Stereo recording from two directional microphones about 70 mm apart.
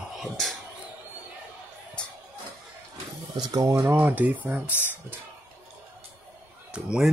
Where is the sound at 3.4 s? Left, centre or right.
Right.